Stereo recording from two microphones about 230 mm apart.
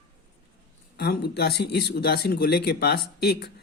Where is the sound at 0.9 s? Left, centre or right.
Left.